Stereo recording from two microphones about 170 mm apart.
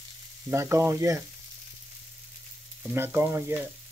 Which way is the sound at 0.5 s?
15° right (ahead or behind).